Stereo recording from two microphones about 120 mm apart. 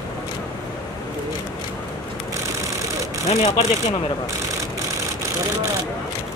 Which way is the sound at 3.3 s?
70° left (ahead or behind).